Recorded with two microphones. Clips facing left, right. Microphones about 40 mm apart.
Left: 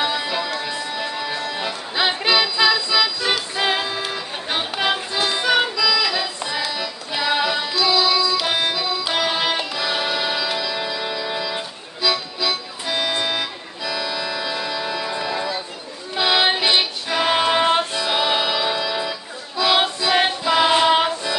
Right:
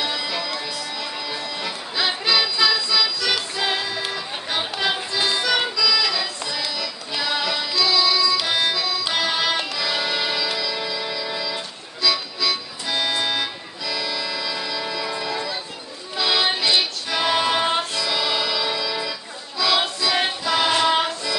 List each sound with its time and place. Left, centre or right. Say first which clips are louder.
0.0 s music: left 3 dB; centre
1.0 s music: left 4 dB; centre
5.2 s music: left 2 dB; centre